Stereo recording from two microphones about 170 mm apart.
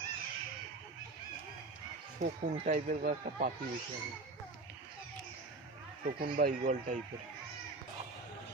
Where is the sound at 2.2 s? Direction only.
45° right (ahead or behind).